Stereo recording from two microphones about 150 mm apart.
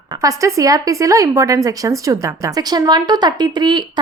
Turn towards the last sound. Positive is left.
turn(degrees=-30)  # may be behind; listen again after turning